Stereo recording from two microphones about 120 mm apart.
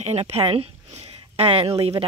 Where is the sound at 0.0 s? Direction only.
60° right (ahead or behind).